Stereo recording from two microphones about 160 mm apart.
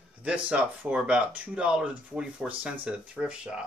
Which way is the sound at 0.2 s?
5° right (ahead or behind).